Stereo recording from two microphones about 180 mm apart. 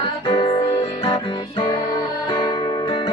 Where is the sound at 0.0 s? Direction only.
25° left (ahead or behind).